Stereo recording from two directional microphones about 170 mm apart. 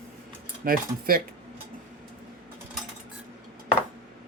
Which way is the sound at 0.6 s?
60° right (ahead or behind).